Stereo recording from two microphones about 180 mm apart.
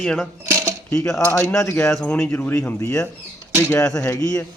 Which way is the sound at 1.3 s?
15° left (ahead or behind).